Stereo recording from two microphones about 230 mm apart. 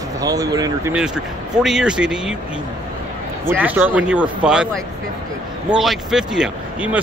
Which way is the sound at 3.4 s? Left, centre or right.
Centre.